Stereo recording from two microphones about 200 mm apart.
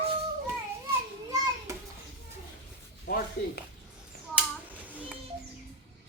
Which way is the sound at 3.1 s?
55° left (ahead or behind).